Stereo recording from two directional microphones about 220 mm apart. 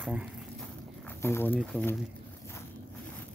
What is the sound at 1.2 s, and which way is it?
Speech, 10° left (ahead or behind).